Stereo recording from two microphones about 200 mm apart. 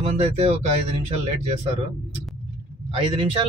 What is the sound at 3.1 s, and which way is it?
Speech, 25° right (ahead or behind).